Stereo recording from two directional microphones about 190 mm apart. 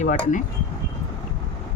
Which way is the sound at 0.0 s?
40° left (ahead or behind).